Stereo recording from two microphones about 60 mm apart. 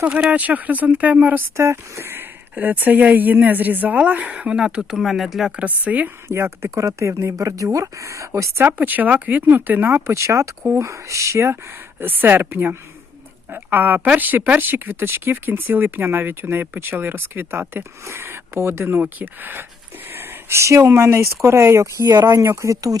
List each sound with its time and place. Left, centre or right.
0.0 s speech: right
1.5 s speech: right; by 5.5 s centre
5.5 s speech: right
6.2 s speech: right
6.8 s speech: right
8.6 s speech: right
10.1 s speech: right
11.9 s speech: right
20.1 s a sound: right
20.6 s speech: right